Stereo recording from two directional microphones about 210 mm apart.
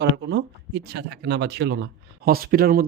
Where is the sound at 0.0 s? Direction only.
55° right (ahead or behind).